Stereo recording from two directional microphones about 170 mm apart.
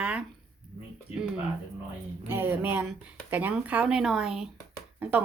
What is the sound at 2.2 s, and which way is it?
A woman's voice, 15° right (ahead or behind).